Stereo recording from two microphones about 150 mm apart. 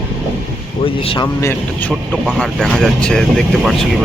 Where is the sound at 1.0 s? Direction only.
35° left (ahead or behind).